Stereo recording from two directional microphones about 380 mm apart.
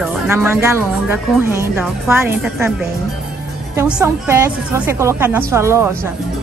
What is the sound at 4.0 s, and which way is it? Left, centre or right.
A woman's voice, centre.